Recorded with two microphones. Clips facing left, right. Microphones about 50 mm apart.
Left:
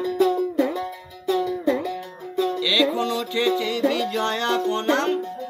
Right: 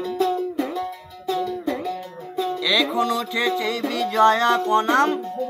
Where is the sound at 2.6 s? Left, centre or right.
Right.